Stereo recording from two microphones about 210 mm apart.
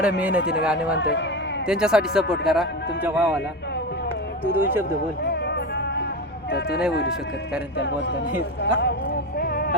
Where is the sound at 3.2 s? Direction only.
15° right (ahead or behind).